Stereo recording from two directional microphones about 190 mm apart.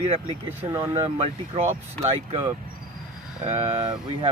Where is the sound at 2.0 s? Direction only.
30° right (ahead or behind).